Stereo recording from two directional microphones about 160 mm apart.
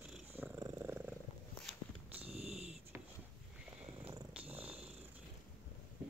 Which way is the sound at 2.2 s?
40° right (ahead or behind).